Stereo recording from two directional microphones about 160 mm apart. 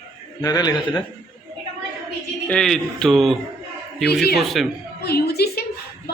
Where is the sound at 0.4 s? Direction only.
25° left (ahead or behind).